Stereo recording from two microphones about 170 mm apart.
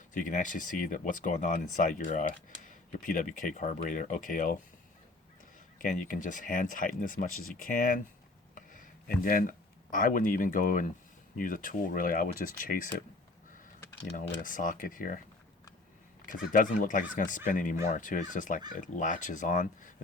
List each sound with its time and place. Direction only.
0.1 s speech: 50° left (ahead or behind)
5.8 s speech: 50° left (ahead or behind)
14.1 s speech: 50° left (ahead or behind)
16.2 s speech: 50° left (ahead or behind)